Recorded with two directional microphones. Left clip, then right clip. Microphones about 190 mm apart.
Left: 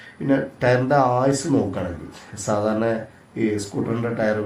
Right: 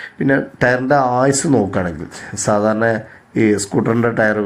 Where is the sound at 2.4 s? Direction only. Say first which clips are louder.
Right 6 dB; 35° right (ahead or behind).